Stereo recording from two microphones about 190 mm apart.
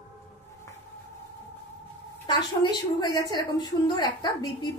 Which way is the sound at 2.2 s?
25° left (ahead or behind).